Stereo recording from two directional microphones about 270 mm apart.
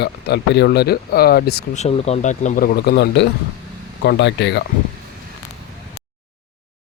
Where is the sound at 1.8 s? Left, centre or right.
Left.